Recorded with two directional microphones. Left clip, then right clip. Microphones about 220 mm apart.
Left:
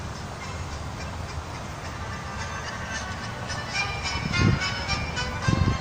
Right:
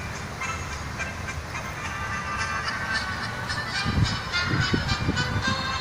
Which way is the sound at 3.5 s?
15° left (ahead or behind).